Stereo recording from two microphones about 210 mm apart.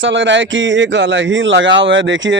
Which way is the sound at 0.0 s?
60° right (ahead or behind).